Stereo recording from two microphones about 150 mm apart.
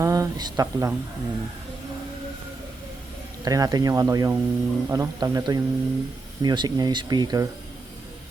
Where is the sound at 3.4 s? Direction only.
25° right (ahead or behind).